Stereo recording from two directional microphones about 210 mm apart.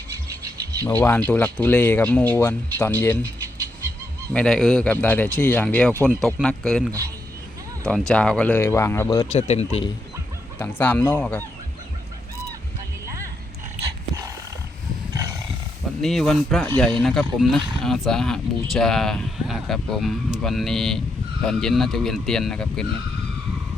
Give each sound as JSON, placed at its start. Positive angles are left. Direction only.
{"t": 0.9, "sound": "speech", "side_deg": 10}
{"t": 4.4, "sound": "speech", "side_deg": 5}
{"t": 6.0, "sound": "speech", "side_deg": -15}
{"t": 6.2, "sound": "speech", "side_deg": 5}
{"t": 9.3, "sound": "speech", "side_deg": 30}
{"t": 10.6, "sound": "speech", "side_deg": 10}
{"t": 15.1, "sound": "roar", "side_deg": -15}
{"t": 16.0, "sound": "speech", "side_deg": 0}